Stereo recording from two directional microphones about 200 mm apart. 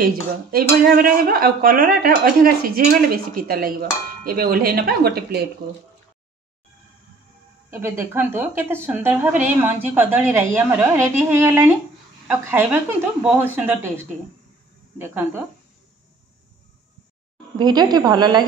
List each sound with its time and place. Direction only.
0.0 s speech: 45° right (ahead or behind)
7.7 s speech: 15° right (ahead or behind)
17.6 s a woman's voice: 20° right (ahead or behind)